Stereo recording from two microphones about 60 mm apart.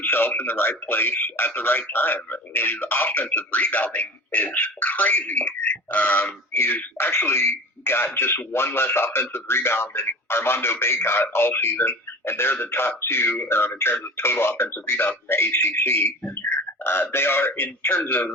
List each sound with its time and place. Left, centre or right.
0.0 s speech: left
6.5 s speech: left